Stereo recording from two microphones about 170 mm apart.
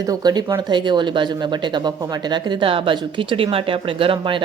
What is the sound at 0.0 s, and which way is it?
A woman's voice, 20° right (ahead or behind).